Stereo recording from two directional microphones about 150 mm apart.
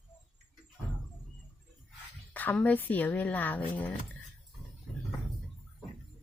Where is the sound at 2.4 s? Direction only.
10° left (ahead or behind).